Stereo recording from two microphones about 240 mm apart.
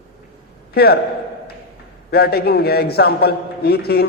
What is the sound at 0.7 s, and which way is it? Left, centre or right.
Speech, left.